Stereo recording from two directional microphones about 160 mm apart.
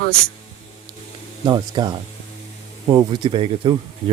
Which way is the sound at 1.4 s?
25° right (ahead or behind).